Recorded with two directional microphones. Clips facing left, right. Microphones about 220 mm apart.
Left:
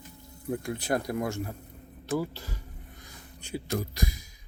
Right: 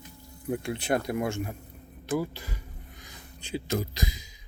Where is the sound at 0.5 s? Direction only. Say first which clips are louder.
Right 1 dB; 25° right (ahead or behind).